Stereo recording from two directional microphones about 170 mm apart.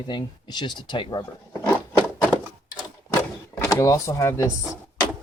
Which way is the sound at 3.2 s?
20° left (ahead or behind).